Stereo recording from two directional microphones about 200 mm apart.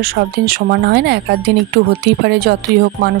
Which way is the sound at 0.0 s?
50° right (ahead or behind).